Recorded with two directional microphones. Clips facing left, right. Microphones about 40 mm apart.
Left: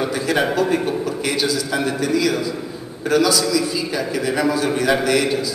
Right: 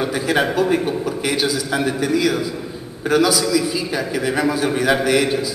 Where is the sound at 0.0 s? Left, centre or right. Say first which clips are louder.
Right 1 dB; centre.